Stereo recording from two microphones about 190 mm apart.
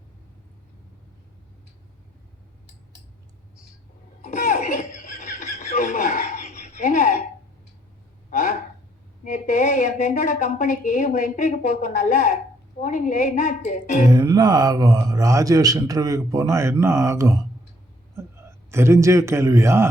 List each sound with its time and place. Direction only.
4.3 s baby laughter: 50° left (ahead or behind)
8.3 s a sound: 45° left (ahead or behind)
9.2 s a woman's voice: 45° left (ahead or behind)
14.1 s speech: 20° right (ahead or behind)
16.8 s mantra: 15° right (ahead or behind)
18.2 s a man's voice: 15° right (ahead or behind)